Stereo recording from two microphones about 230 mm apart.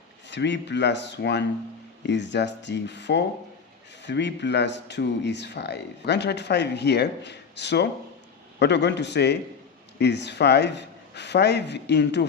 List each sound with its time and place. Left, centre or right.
0.3 s speech: left